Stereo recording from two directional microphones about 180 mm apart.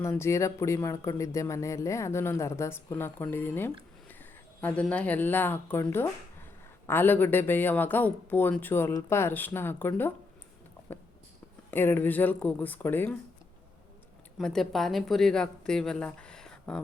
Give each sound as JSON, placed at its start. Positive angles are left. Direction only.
{"t": 0.0, "sound": "speech", "side_deg": 15}
{"t": 11.7, "sound": "speech", "side_deg": 10}
{"t": 14.3, "sound": "a woman's voice", "side_deg": 0}